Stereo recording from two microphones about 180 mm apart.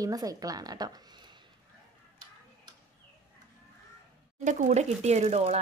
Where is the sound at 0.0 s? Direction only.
20° right (ahead or behind).